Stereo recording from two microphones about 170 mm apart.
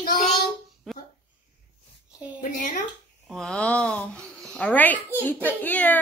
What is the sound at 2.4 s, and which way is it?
Speech, 55° left (ahead or behind).